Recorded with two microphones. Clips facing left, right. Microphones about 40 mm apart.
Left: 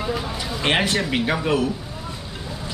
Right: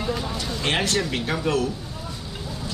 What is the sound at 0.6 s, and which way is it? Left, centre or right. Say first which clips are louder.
Speech: left 3 dB; left.